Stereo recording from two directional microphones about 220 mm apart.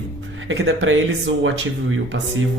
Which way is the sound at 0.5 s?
60° right (ahead or behind).